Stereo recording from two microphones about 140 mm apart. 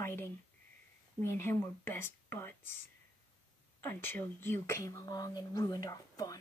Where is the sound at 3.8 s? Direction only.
15° left (ahead or behind).